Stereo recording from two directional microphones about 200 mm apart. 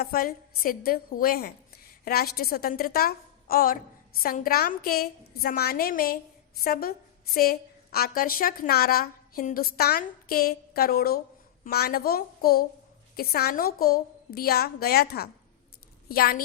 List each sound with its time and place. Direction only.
0.0 s a woman's voice: 50° left (ahead or behind)
7.9 s a woman's voice: 45° left (ahead or behind)